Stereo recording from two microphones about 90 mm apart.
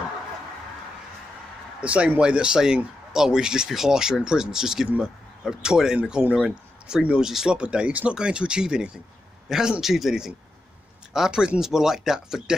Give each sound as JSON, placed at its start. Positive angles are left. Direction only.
{"t": 1.8, "sound": "speech", "side_deg": -15}